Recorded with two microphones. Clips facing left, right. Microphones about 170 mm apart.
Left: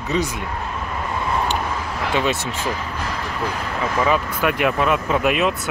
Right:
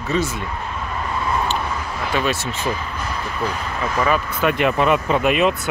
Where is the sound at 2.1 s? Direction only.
20° left (ahead or behind).